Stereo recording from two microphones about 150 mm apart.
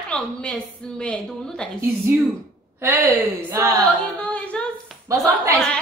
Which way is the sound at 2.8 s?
15° right (ahead or behind).